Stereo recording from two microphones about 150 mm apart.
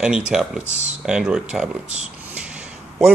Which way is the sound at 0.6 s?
50° right (ahead or behind).